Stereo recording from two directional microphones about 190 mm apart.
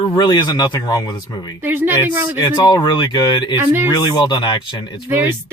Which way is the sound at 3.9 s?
20° left (ahead or behind).